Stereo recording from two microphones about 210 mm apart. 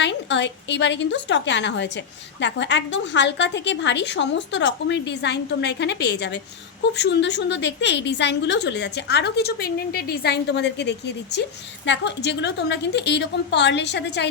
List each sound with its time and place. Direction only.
0.0 s a woman's voice: 55° left (ahead or behind)